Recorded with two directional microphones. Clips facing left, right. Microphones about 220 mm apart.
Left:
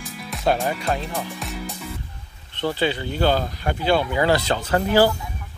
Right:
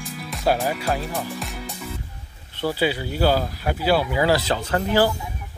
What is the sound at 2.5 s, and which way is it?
Speech, 10° right (ahead or behind).